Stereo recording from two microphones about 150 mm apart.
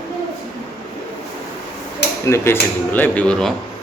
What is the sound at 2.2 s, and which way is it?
A man's voice, 15° left (ahead or behind).